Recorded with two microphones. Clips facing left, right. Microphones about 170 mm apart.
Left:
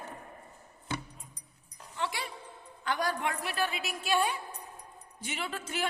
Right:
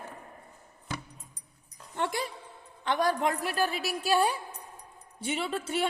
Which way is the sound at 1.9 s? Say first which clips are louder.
Right 4 dB; 50° right (ahead or behind).